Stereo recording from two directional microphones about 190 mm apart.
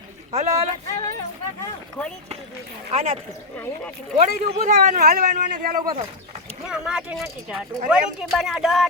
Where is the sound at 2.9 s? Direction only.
30° right (ahead or behind).